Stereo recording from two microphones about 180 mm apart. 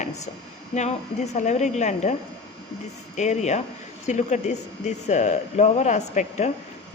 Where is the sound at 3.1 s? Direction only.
40° left (ahead or behind).